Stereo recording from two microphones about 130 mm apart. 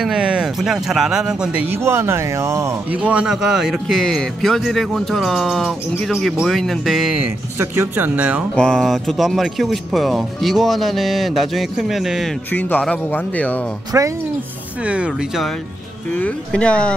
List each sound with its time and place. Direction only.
0.0 s speech: 5° right (ahead or behind); by 2.7 s 20° right (ahead or behind)
2.9 s speech: 10° right (ahead or behind)
7.5 s speech: 20° right (ahead or behind)
8.5 s speech: 5° left (ahead or behind)
12.4 s speech: 15° left (ahead or behind)
13.9 s speech: 20° right (ahead or behind)
14.8 s speech: 10° right (ahead or behind)
16.2 s speech: 10° left (ahead or behind)